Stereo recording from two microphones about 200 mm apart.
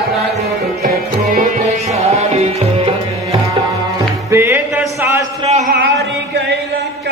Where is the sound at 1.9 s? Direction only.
30° right (ahead or behind).